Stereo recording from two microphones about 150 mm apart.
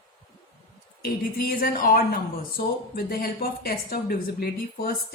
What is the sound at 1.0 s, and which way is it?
Speech, 90° left.